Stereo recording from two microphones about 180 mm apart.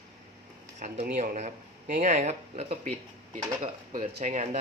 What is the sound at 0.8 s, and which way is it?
Speech, 45° right (ahead or behind).